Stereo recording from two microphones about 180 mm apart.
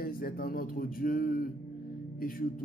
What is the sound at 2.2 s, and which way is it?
Speech, 50° left (ahead or behind).